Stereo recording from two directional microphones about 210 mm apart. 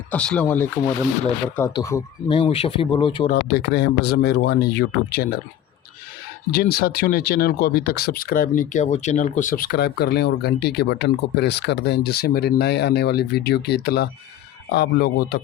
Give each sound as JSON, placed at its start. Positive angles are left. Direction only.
{"t": 0.1, "sound": "speech", "side_deg": 5}
{"t": 3.2, "sound": "speech", "side_deg": 50}
{"t": 6.5, "sound": "speech", "side_deg": 45}